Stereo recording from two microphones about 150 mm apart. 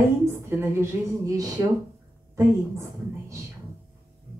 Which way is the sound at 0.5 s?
20° right (ahead or behind).